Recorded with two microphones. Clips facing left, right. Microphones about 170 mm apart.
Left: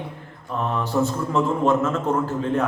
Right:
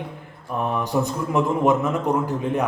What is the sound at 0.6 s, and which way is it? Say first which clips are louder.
Speech: even; 15° right (ahead or behind).